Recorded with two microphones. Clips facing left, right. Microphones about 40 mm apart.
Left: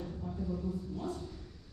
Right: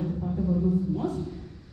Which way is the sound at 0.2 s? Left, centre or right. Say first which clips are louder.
Right 11 dB; right.